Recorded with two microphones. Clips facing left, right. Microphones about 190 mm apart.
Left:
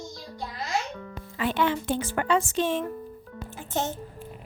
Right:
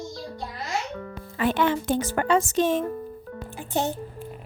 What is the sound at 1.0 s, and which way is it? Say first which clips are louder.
Speech: right 4 dB; 50° right (ahead or behind).